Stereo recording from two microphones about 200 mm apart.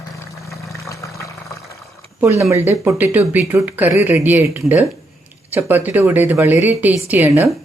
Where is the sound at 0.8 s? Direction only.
15° left (ahead or behind).